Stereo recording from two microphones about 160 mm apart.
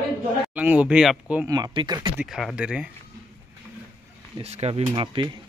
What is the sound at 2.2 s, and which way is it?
Speech, centre (ahead or behind).